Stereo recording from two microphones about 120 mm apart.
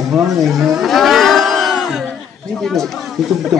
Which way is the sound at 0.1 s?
5° right (ahead or behind).